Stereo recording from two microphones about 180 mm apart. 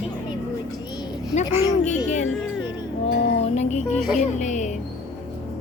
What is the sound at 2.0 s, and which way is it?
Speech, 40° left (ahead or behind).